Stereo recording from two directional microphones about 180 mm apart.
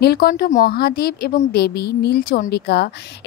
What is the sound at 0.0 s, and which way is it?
Speech, 60° left (ahead or behind).